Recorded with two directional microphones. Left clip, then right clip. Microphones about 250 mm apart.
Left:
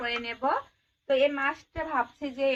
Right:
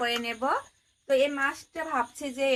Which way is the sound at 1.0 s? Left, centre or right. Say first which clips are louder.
Even; centre.